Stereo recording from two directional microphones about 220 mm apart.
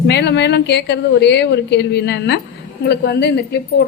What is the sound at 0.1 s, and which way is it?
Speech, 50° left (ahead or behind).